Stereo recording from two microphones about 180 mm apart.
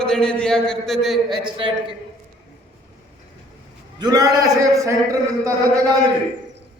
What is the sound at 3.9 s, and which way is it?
A man's voice, 20° right (ahead or behind).